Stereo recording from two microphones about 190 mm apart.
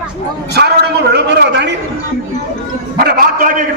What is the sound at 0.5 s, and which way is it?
A man's voice, 60° right (ahead or behind).